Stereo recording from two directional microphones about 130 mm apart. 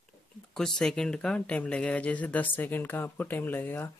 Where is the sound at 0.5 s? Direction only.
5° left (ahead or behind).